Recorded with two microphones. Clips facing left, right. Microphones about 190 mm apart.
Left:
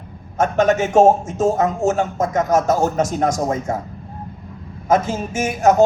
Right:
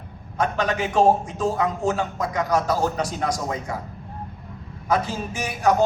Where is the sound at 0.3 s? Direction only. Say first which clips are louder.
Left 7 dB; 45° left (ahead or behind).